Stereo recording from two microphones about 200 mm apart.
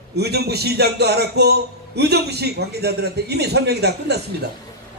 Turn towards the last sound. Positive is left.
turn(degrees=-55)  # may be behind; listen again after turning